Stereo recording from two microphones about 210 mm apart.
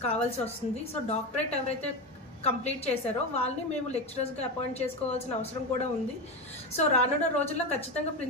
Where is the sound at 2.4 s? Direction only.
30° left (ahead or behind).